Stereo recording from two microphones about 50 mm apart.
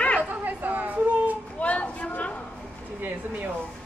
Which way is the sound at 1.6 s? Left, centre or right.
Left.